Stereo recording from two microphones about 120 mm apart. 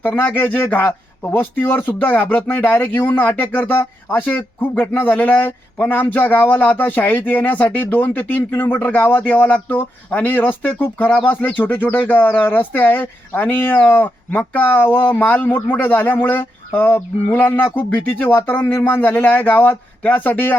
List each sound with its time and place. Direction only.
0.0 s speech: 15° left (ahead or behind)